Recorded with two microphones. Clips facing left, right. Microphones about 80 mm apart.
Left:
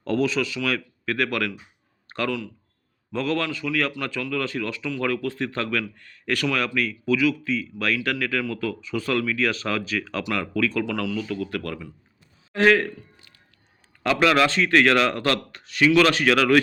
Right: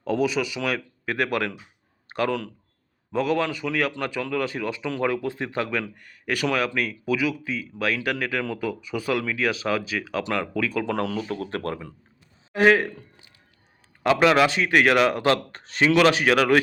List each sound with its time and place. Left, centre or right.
0.0 s speech: centre
10.8 s speech: right
12.5 s speech: centre
15.5 s speech: right
16.0 s speech: centre